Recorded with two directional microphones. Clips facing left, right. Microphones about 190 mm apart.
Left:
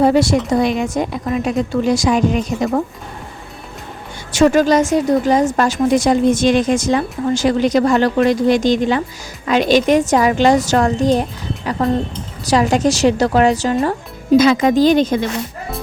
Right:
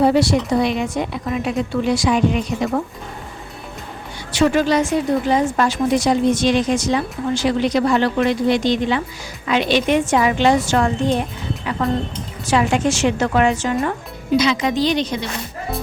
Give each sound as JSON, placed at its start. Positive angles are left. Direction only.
{"t": 0.0, "sound": "a woman's voice", "side_deg": 45}
{"t": 4.3, "sound": "a woman's voice", "side_deg": 45}
{"t": 14.3, "sound": "a woman's voice", "side_deg": 50}